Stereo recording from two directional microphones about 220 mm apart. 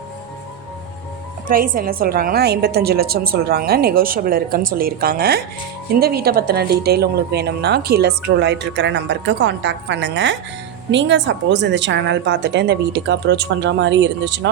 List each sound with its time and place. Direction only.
1.5 s a woman's voice: 40° right (ahead or behind)